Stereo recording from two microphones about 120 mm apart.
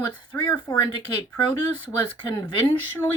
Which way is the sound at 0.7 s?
40° left (ahead or behind).